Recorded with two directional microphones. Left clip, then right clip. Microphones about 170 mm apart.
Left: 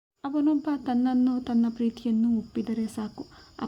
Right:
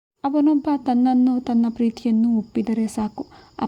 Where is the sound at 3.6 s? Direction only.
35° right (ahead or behind).